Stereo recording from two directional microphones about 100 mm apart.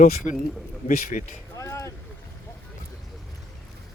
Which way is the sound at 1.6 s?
30° left (ahead or behind).